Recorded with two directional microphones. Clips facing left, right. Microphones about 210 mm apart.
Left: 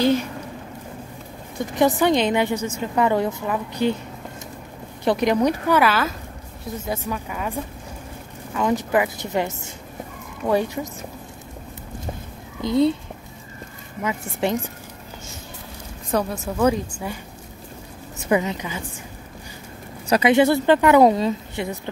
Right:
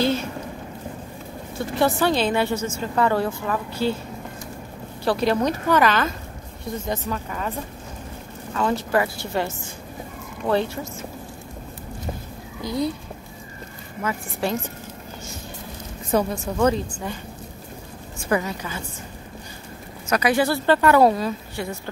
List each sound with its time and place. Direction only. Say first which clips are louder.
0.0 s a sound: left 3 dB; 15° left (ahead or behind)
1.6 s a woman's voice: left 2 dB; 15° left (ahead or behind)
5.0 s a woman's voice: left 2 dB; 15° left (ahead or behind)
8.5 s a woman's voice: left 1 dB; 15° left (ahead or behind)
12.6 s speech: left 6 dB; 25° left (ahead or behind)
14.0 s speech: left 2 dB; 20° left (ahead or behind)
16.1 s a woman's voice: right 1 dB; centre (ahead or behind)
18.3 s speech: left 3 dB; 20° left (ahead or behind)
20.1 s speech: left 4 dB; 25° left (ahead or behind)